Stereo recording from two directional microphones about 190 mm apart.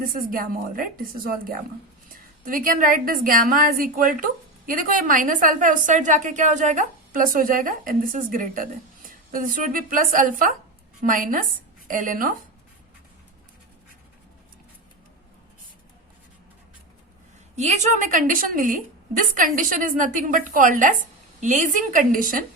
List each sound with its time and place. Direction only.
0.0 s a woman's voice: 45° right (ahead or behind)
17.6 s a woman's voice: 40° right (ahead or behind)